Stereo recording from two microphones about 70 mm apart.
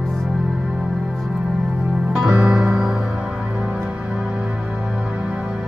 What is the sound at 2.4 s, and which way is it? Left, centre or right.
Music, centre.